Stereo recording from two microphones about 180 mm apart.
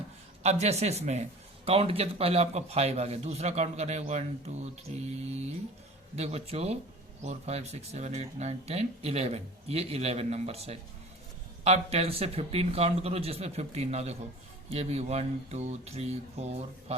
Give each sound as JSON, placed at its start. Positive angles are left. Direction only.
{"t": 0.4, "sound": "a man's voice", "side_deg": -35}